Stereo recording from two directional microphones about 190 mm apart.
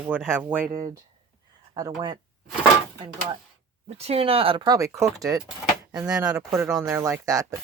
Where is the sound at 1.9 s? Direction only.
20° right (ahead or behind).